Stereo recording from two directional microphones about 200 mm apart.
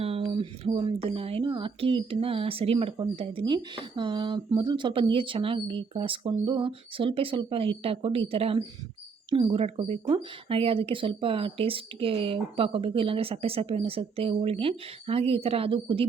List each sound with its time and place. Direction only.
0.3 s speech: 25° right (ahead or behind)